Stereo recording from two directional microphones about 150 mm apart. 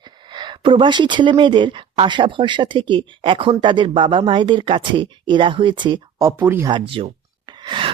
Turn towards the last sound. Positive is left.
turn(degrees=-30)  # may be behind; listen again after turning